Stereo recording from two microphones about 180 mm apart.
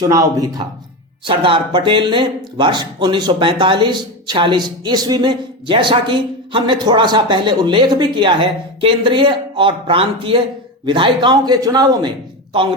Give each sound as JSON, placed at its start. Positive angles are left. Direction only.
{"t": 0.0, "sound": "speech", "side_deg": -20}